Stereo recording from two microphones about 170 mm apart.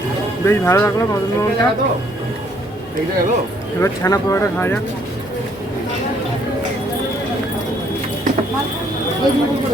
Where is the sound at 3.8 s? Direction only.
20° left (ahead or behind).